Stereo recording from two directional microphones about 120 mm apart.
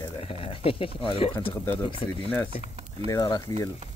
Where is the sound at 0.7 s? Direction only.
50° left (ahead or behind).